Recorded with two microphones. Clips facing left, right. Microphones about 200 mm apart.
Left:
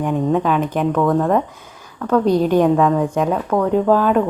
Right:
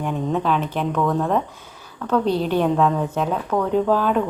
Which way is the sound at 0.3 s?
10° left (ahead or behind).